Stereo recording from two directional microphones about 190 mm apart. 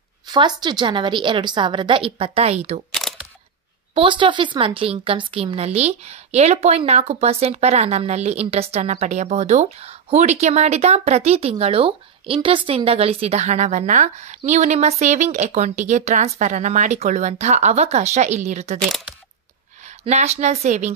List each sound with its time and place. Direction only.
0.3 s a woman's voice: 20° right (ahead or behind)
2.9 s single-lens reflex camera: centre (ahead or behind)
3.9 s speech: 25° right (ahead or behind)
18.8 s speech: centre (ahead or behind)
20.1 s speech: 35° right (ahead or behind)